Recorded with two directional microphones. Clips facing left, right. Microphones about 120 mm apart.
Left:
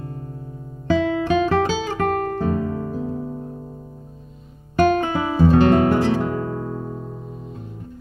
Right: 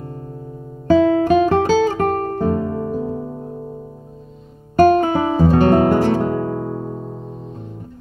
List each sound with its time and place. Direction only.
0.8 s guitar: 40° right (ahead or behind)
3.1 s music: 30° right (ahead or behind)
4.7 s music: 40° right (ahead or behind)
6.8 s music: 25° right (ahead or behind)